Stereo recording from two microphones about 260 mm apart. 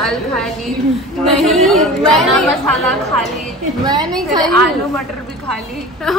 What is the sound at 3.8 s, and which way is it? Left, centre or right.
Speech, centre.